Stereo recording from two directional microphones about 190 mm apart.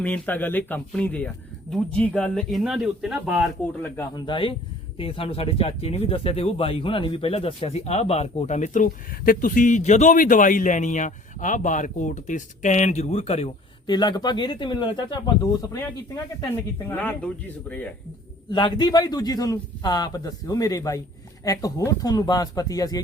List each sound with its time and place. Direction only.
0.0 s speech: 10° left (ahead or behind)
4.1 s a man's voice: 25° left (ahead or behind)
16.7 s speech: 10° left (ahead or behind)
18.5 s a man's voice: 25° left (ahead or behind)